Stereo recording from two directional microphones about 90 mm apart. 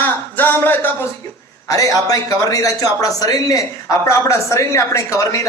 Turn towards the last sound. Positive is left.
turn(degrees=35)  # may be behind; listen again after turning